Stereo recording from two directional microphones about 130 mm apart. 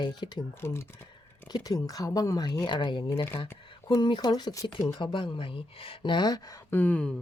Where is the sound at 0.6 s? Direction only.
20° left (ahead or behind).